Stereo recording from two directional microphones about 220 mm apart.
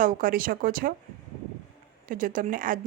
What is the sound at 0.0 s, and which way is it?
Speech, 40° right (ahead or behind).